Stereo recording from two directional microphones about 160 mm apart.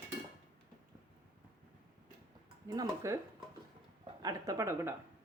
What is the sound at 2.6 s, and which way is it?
Speech, 25° right (ahead or behind).